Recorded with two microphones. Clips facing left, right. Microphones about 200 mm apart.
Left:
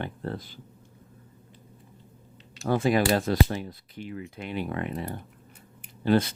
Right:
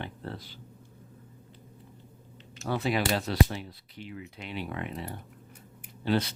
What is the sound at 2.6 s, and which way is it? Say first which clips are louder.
Speech: left 5 dB; 45° left (ahead or behind).